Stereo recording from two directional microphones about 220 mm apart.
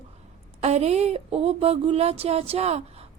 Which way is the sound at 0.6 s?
30° right (ahead or behind).